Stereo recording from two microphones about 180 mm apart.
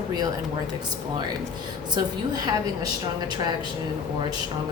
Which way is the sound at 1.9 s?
20° right (ahead or behind).